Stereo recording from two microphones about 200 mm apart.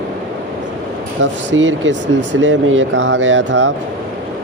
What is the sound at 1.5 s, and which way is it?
Speech, 70° right (ahead or behind).